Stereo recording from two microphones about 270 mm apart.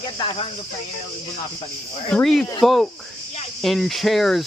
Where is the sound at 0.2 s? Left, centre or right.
Centre.